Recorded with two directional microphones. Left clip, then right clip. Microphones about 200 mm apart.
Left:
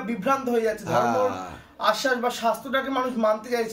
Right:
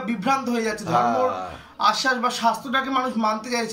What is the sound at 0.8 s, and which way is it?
Speech, 40° left (ahead or behind).